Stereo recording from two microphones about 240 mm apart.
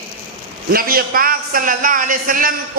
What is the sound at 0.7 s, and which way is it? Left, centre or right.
Speech, right.